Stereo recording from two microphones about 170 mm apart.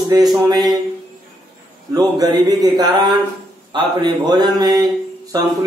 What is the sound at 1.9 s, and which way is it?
Speech, 20° right (ahead or behind).